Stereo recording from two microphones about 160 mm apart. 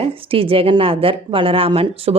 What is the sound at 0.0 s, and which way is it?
Speech, 35° right (ahead or behind).